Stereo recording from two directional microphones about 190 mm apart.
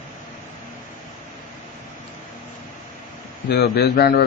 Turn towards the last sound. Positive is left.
turn(degrees=60)  # may be behind; listen again after turning